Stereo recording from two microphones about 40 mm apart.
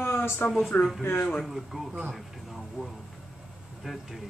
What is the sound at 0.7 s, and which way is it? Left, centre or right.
Speech, left.